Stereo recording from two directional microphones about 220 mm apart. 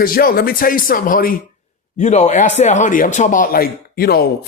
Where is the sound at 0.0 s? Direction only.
40° left (ahead or behind).